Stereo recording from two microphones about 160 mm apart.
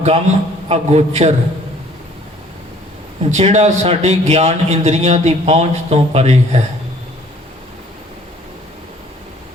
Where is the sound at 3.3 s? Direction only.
45° right (ahead or behind).